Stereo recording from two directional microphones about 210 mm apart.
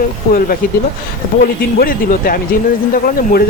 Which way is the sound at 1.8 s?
40° left (ahead or behind).